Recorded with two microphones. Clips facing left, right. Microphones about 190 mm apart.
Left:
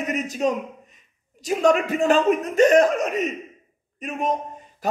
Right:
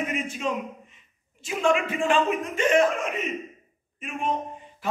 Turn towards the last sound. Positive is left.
turn(degrees=40)  # may be behind; listen again after turning